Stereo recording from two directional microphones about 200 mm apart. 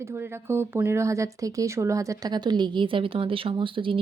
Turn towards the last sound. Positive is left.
turn(degrees=-25)  # may be behind; listen again after turning